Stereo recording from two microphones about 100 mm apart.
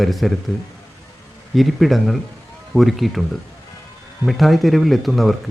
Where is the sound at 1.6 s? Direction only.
Centre (ahead or behind).